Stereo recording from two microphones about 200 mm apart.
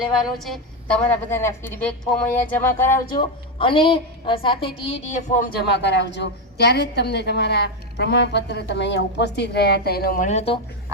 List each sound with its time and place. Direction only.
0.0 s a woman's voice: centre (ahead or behind)
3.1 s a woman's voice: 25° left (ahead or behind)